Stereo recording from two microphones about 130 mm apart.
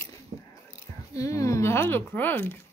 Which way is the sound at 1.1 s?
25° left (ahead or behind).